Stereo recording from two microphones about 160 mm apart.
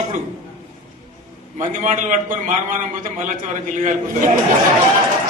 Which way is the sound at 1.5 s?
55° right (ahead or behind).